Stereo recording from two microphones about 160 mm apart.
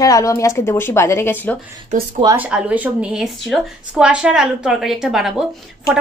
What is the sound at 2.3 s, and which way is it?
Speech, 10° right (ahead or behind).